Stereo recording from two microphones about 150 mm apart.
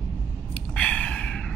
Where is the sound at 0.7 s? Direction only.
10° left (ahead or behind).